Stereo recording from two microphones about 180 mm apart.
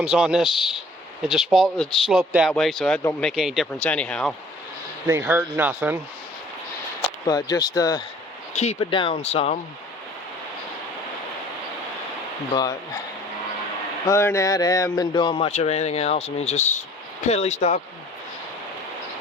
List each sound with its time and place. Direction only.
0.1 s speech: 5° right (ahead or behind)
5.0 s speech: 10° right (ahead or behind)
7.3 s speech: 20° left (ahead or behind)
8.5 s speech: 35° left (ahead or behind)
14.1 s speech: 15° left (ahead or behind); by 17.7 s 40° left (ahead or behind)